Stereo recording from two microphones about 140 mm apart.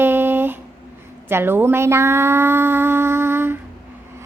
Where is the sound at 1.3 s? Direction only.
15° right (ahead or behind).